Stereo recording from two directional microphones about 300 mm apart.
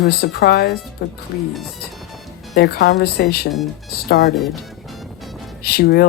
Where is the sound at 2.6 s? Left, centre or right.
Left.